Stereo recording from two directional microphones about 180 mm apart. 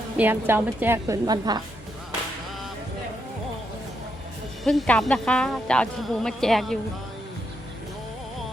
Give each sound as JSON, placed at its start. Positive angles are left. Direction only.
{"t": 0.2, "sound": "a woman's voice", "side_deg": -10}
{"t": 4.6, "sound": "a woman's voice", "side_deg": 0}